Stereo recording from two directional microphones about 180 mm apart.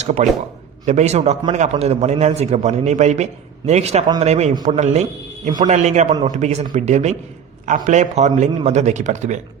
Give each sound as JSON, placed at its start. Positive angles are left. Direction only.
{"t": 0.0, "sound": "a man's voice", "side_deg": -40}